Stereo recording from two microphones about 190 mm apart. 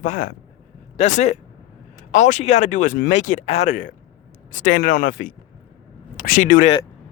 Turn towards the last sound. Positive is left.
turn(degrees=40)  # may be behind; listen again after turning